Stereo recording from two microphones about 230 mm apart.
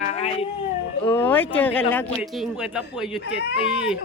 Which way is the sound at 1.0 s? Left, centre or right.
Centre.